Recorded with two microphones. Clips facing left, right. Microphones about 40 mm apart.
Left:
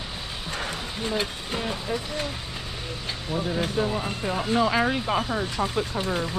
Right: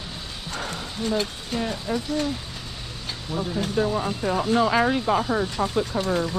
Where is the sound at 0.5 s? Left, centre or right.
Centre.